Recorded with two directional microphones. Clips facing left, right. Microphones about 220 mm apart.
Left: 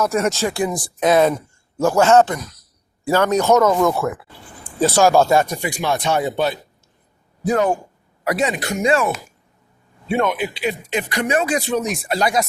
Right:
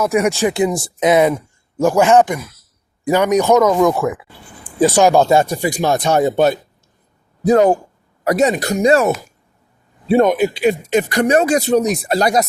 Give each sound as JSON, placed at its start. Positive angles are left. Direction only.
{"t": 0.0, "sound": "speech", "side_deg": -15}